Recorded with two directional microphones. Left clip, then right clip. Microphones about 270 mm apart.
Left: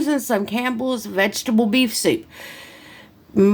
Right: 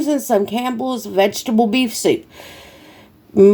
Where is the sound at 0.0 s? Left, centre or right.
Centre.